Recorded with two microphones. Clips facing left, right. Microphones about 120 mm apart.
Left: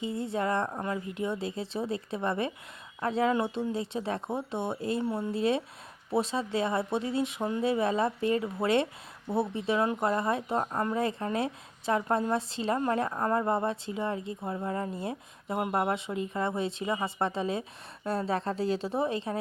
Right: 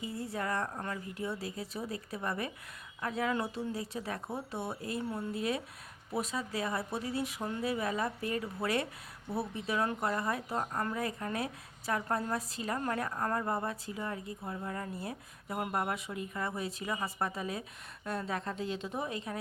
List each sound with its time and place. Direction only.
0.0 s a woman's voice: 25° left (ahead or behind)